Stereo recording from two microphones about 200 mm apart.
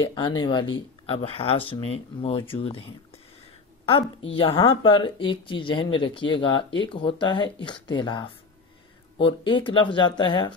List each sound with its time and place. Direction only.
0.0 s a woman's voice: 25° left (ahead or behind)
3.8 s a woman's voice: 30° left (ahead or behind)